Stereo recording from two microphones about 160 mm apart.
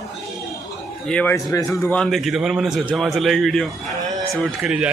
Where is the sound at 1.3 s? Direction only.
20° left (ahead or behind).